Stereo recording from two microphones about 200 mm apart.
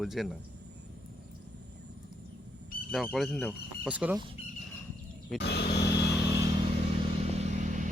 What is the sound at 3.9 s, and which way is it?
Speech, 5° right (ahead or behind).